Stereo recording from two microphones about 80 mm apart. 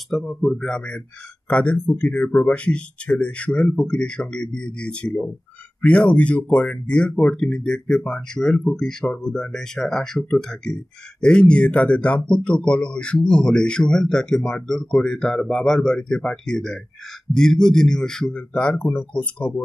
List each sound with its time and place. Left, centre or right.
0.1 s a man's voice: centre; by 19.6 s left